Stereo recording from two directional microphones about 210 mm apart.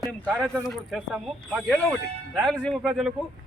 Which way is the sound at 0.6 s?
Centre (ahead or behind).